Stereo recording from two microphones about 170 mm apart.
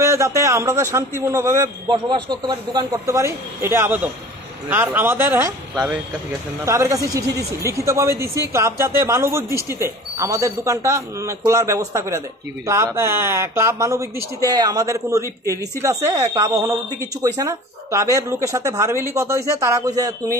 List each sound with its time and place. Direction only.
0.0 s speech: 15° right (ahead or behind)
1.9 s a man's voice: 25° right (ahead or behind)